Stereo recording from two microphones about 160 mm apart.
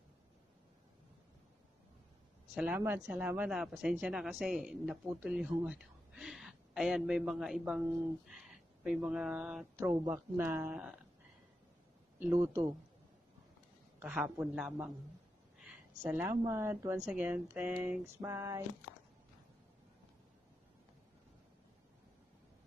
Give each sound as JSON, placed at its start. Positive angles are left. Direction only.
{"t": 2.5, "sound": "speech", "side_deg": -10}
{"t": 12.2, "sound": "speech", "side_deg": -10}
{"t": 13.9, "sound": "speech", "side_deg": -10}
{"t": 18.2, "sound": "a sound", "side_deg": -20}